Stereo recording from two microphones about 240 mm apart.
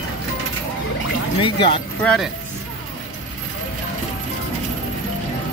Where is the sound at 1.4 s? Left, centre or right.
Left.